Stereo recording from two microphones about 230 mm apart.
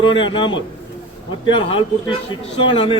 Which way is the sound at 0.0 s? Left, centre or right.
Left.